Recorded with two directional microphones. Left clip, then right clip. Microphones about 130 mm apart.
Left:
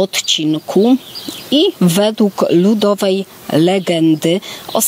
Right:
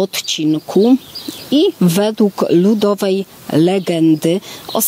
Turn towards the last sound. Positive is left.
turn(degrees=15)  # may be behind; listen again after turning